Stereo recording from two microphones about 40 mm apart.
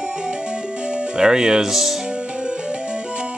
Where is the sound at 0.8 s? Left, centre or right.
Right.